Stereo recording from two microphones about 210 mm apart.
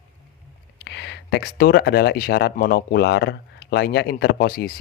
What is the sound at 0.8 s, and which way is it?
Speech, 55° left (ahead or behind).